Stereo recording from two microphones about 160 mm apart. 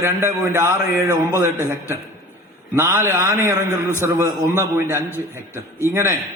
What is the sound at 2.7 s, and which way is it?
A man's voice, 15° right (ahead or behind).